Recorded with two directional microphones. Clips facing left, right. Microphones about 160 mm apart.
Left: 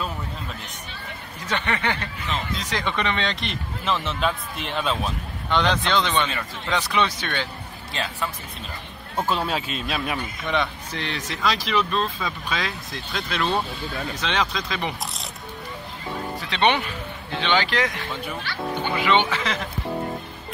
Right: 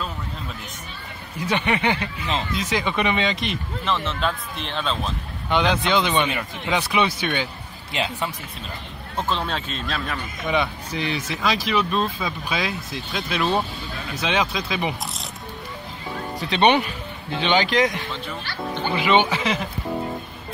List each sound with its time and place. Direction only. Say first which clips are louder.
1.4 s speech: right 4 dB; 15° right (ahead or behind); by 5.1 s 5° left (ahead or behind)
5.5 s speech: right 2 dB; 10° right (ahead or behind)
7.9 s speech: right 3 dB; 20° right (ahead or behind)
9.2 s speech: left 1 dB; 10° left (ahead or behind)
10.4 s speech: right 4 dB; 10° right (ahead or behind)
16.3 s speech: right 4 dB; 15° right (ahead or behind)
18.9 s speech: right 3 dB; 15° right (ahead or behind)